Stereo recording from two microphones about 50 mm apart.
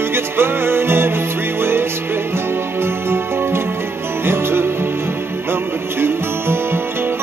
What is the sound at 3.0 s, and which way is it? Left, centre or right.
Music, right.